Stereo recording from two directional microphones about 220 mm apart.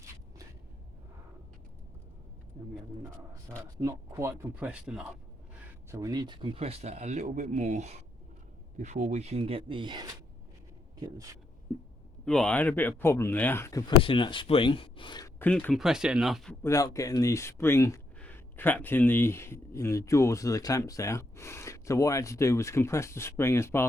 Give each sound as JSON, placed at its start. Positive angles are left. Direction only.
{"t": 3.8, "sound": "speech", "side_deg": -15}
{"t": 5.9, "sound": "speech", "side_deg": -15}
{"t": 12.2, "sound": "speech", "side_deg": 5}
{"t": 15.4, "sound": "speech", "side_deg": 5}
{"t": 16.6, "sound": "speech", "side_deg": 15}